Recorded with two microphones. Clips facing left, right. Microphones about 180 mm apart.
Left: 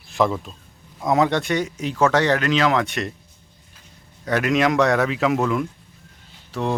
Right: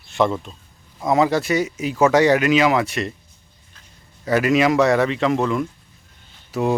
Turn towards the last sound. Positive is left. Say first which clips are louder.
# right 4 dB
turn(degrees=-5)  # may be behind; listen again after turning